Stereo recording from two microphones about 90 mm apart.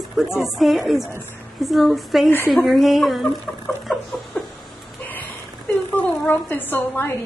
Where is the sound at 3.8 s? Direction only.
Centre (ahead or behind).